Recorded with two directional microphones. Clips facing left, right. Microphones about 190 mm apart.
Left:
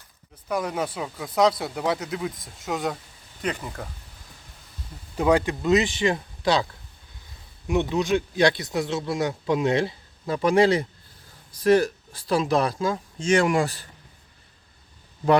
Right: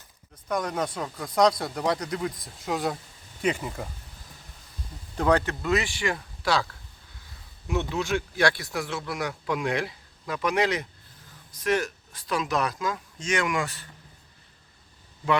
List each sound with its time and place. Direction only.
0.4 s speech: 5° left (ahead or behind)
5.1 s speech: 10° left (ahead or behind)
7.7 s speech: 15° left (ahead or behind); by 13.8 s 35° left (ahead or behind)